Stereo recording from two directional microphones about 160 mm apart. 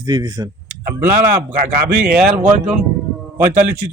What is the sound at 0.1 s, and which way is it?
Speech, 25° right (ahead or behind).